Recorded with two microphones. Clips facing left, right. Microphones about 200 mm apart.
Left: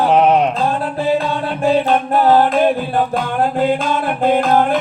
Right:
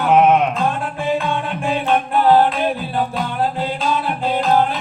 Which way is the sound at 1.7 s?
40° left (ahead or behind).